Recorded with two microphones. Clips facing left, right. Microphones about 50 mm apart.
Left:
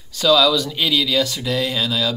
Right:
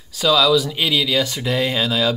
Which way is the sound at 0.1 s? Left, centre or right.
Centre.